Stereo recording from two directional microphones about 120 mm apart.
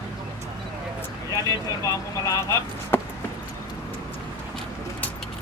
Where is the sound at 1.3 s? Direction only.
30° left (ahead or behind).